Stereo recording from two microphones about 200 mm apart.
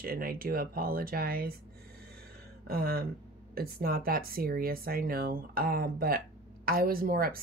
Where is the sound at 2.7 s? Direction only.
50° right (ahead or behind).